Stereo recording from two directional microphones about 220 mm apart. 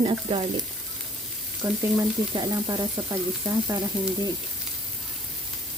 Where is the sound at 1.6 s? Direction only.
10° right (ahead or behind).